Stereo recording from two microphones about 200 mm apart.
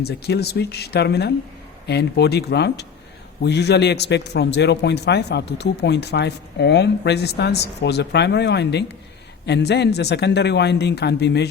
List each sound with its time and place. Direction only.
0.0 s a man's voice: 55° left (ahead or behind)